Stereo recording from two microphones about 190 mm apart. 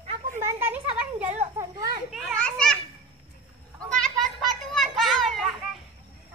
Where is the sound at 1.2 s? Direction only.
35° right (ahead or behind).